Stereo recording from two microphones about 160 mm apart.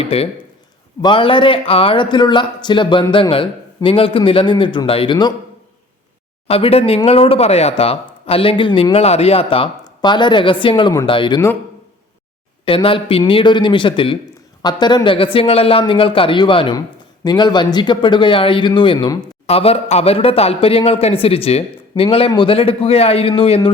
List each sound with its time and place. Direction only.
0.0 s speech: 35° left (ahead or behind)
6.5 s speech: 35° left (ahead or behind)
12.6 s speech: 35° left (ahead or behind)
19.5 s speech: 40° left (ahead or behind)